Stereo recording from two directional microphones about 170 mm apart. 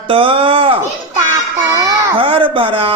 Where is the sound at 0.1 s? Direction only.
30° right (ahead or behind).